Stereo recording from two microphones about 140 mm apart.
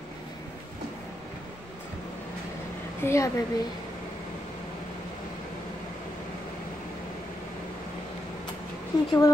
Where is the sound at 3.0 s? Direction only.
20° left (ahead or behind).